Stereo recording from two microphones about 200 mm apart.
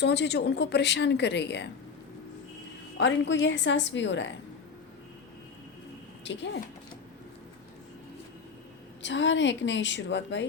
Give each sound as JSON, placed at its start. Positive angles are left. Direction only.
{"t": 0.0, "sound": "a woman's voice", "side_deg": 60}
{"t": 3.0, "sound": "a woman's voice", "side_deg": 65}
{"t": 6.2, "sound": "a woman's voice", "side_deg": 65}
{"t": 9.0, "sound": "a woman's voice", "side_deg": 65}